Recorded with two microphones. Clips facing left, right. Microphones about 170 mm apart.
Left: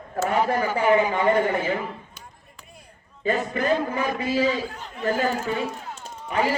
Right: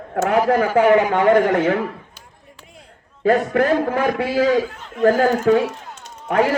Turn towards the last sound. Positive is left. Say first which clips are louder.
# right 6 dB
turn(degrees=-65)  # may be behind; listen again after turning